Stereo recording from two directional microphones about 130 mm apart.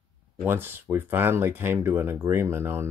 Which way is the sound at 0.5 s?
15° right (ahead or behind).